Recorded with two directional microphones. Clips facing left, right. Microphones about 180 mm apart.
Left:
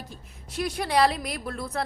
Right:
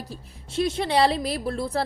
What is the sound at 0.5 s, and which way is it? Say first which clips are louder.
A woman's voice: right 3 dB; 25° right (ahead or behind).